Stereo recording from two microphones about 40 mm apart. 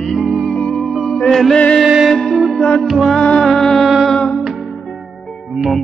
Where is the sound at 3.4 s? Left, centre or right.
Centre.